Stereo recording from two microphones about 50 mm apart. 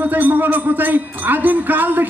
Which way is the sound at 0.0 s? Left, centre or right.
Right.